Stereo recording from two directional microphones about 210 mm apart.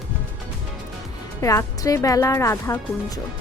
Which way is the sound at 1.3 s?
15° left (ahead or behind).